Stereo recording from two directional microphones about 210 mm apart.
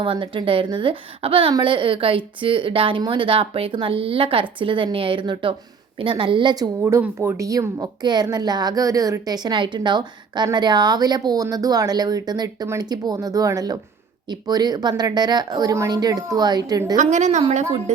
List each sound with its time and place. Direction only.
0.0 s a woman's voice: 25° right (ahead or behind)
6.8 s a woman's voice: 10° right (ahead or behind)
17.0 s a woman's voice: 35° right (ahead or behind)